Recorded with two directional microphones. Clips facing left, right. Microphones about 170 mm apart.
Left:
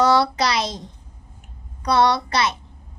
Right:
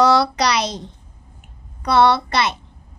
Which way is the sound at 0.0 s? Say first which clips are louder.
Right 2 dB; 75° right (ahead or behind).